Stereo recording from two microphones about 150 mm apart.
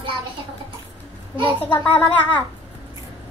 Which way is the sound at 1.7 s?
10° left (ahead or behind).